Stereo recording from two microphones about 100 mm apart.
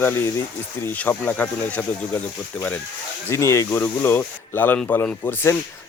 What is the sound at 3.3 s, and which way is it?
Speech, 30° left (ahead or behind).